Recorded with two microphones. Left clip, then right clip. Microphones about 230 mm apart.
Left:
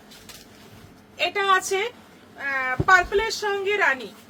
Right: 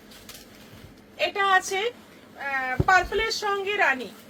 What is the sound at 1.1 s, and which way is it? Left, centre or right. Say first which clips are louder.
A woman's voice: left 1 dB; centre.